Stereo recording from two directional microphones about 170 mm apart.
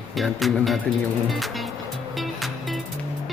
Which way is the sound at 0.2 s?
Centre (ahead or behind).